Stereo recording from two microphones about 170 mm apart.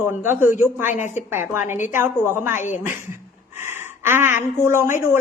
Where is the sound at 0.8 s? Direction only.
45° left (ahead or behind).